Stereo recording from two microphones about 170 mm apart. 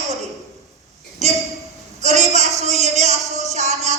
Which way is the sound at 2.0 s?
40° right (ahead or behind).